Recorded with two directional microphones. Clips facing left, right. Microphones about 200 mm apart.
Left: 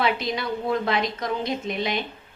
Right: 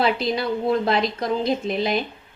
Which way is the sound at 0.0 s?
35° right (ahead or behind).